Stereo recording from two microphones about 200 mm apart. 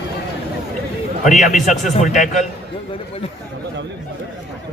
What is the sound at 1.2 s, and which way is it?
Speech, 35° left (ahead or behind).